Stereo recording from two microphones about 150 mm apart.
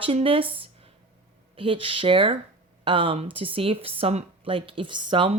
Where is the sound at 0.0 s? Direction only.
40° right (ahead or behind).